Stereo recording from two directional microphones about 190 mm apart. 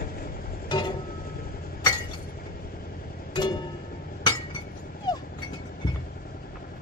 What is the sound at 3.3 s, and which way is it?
Music, 25° left (ahead or behind).